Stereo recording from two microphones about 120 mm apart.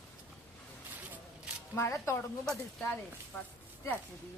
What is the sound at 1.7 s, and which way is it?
Speech, 20° left (ahead or behind).